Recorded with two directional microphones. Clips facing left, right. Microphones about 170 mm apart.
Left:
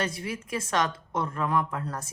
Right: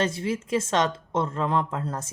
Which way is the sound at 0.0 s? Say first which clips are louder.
Right 5 dB; 25° right (ahead or behind).